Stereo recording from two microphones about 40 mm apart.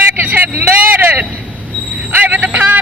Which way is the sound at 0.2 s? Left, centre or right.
Right.